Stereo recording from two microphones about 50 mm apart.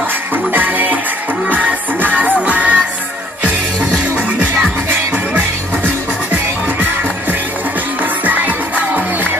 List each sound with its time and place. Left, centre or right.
0.5 s music: right
8.3 s music: right